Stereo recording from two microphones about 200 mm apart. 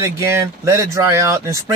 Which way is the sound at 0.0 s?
15° right (ahead or behind).